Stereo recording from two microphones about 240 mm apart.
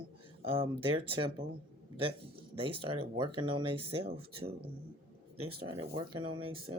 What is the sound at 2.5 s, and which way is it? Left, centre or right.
Speech, right.